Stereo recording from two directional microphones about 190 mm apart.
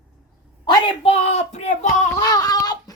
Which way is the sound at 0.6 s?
25° left (ahead or behind).